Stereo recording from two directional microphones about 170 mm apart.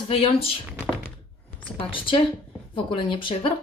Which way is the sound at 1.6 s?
30° left (ahead or behind).